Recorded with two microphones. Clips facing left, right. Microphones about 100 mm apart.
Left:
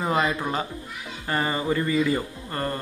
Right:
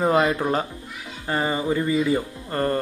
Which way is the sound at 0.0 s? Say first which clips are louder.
Right 4 dB; 40° right (ahead or behind).